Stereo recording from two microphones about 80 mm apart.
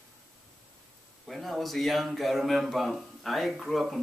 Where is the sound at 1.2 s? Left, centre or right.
Centre.